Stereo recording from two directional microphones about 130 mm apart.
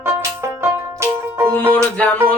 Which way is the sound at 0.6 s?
20° right (ahead or behind).